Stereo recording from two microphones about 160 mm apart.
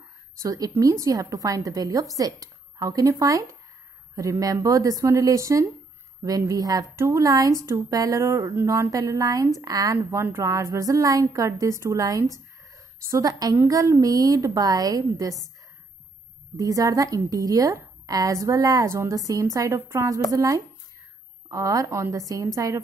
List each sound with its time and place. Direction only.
0.4 s a woman's voice: 20° right (ahead or behind)
16.5 s a woman's voice: 20° right (ahead or behind)